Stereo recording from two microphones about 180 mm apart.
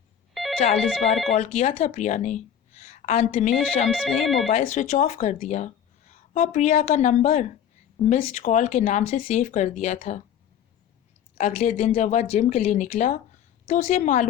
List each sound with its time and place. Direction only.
0.3 s telephone bell ringing: centre (ahead or behind)
0.8 s speech: centre (ahead or behind)
1.4 s a woman's voice: 35° left (ahead or behind)
3.2 s speech: 35° left (ahead or behind)
3.8 s speech: centre (ahead or behind)
4.5 s speech: 45° left (ahead or behind)
11.3 s speech: 40° left (ahead or behind)